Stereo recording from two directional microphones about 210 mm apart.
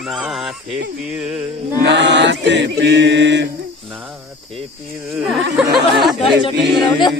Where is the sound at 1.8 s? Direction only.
55° right (ahead or behind).